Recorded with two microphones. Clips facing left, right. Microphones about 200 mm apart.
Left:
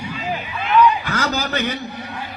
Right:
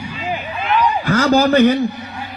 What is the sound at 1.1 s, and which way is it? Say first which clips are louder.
Speech: right 10 dB; 55° right (ahead or behind).